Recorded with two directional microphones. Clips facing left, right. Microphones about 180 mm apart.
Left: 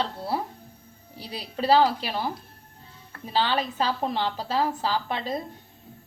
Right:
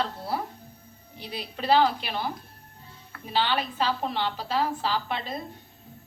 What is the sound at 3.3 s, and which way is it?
A woman's voice, 40° left (ahead or behind).